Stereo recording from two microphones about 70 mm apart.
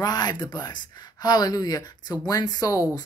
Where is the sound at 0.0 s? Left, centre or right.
Left.